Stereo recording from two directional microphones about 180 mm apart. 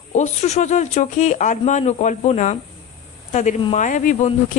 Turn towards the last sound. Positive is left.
turn(degrees=45)  # may be behind; listen again after turning